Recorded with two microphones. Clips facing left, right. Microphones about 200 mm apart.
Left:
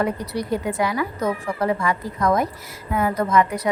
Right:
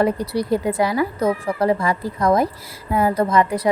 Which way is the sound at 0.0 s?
35° right (ahead or behind).